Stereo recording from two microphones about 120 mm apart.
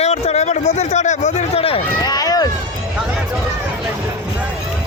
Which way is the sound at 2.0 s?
35° left (ahead or behind).